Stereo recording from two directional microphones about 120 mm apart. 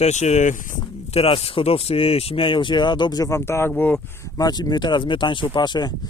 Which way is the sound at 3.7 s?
10° left (ahead or behind).